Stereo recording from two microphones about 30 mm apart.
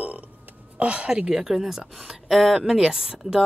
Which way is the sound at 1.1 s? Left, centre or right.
Right.